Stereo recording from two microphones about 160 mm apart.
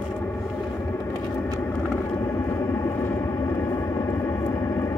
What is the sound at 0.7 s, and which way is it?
Vehicle, 15° left (ahead or behind).